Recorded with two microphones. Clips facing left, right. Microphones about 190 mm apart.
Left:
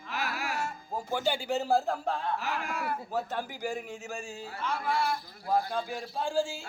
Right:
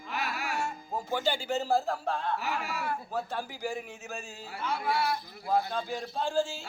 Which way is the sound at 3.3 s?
15° left (ahead or behind).